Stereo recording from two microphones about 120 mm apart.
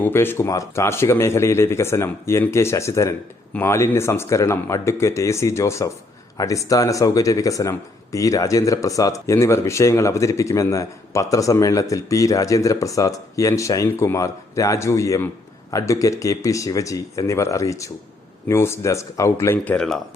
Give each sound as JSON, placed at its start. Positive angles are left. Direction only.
{"t": 0.0, "sound": "speech", "side_deg": 20}
{"t": 19.6, "sound": "speech", "side_deg": 5}